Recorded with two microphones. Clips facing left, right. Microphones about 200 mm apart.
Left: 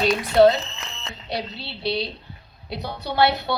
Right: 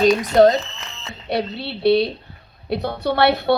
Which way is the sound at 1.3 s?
60° right (ahead or behind).